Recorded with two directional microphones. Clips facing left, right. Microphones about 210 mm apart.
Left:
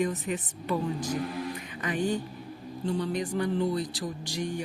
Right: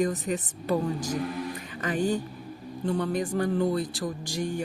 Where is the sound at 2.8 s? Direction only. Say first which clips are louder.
Right 2 dB; 55° right (ahead or behind).